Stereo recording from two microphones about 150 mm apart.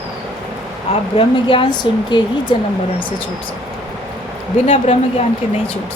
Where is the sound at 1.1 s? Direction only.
35° left (ahead or behind).